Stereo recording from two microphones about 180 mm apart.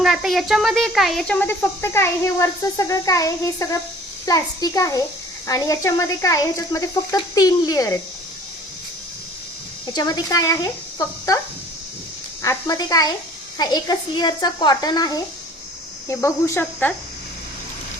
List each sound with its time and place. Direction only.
0.0 s speech: centre (ahead or behind); by 7.9 s 20° left (ahead or behind)
9.9 s speech: 20° left (ahead or behind)
12.4 s speech: 20° left (ahead or behind)